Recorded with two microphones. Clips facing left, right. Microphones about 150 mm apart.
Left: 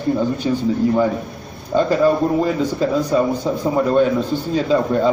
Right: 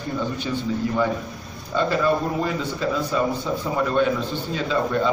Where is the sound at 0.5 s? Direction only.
35° left (ahead or behind).